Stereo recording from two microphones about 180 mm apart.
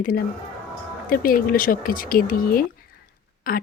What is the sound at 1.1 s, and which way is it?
Speech, 55° left (ahead or behind).